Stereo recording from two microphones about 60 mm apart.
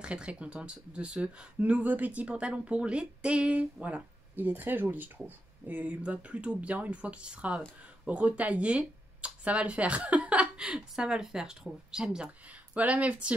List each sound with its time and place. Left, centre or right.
0.0 s speech: centre
12.7 s speech: right